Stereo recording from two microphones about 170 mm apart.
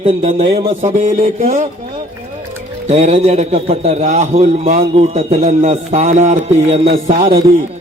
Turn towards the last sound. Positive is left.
turn(degrees=-60)  # may be behind; listen again after turning